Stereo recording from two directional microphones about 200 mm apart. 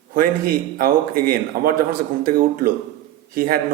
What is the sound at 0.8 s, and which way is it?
A man's voice, 45° right (ahead or behind).